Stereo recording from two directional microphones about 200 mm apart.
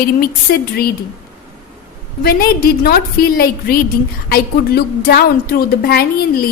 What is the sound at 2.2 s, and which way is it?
A woman's voice, 50° left (ahead or behind).